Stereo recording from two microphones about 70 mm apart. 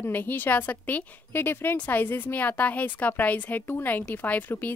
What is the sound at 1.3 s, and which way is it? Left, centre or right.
Speech, left.